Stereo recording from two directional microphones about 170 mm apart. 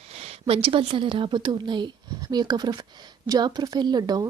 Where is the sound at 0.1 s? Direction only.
35° right (ahead or behind).